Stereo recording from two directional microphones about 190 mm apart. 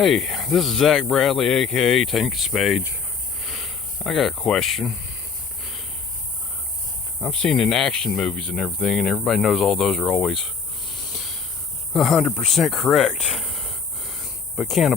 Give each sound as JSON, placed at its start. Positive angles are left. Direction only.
{"t": 0.0, "sound": "speech", "side_deg": 0}
{"t": 3.4, "sound": "cricket", "side_deg": 0}
{"t": 7.2, "sound": "speech", "side_deg": 5}
{"t": 11.9, "sound": "speech", "side_deg": 0}